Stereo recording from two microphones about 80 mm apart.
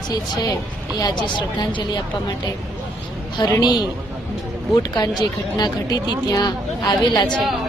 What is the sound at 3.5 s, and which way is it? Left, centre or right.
Speech, left.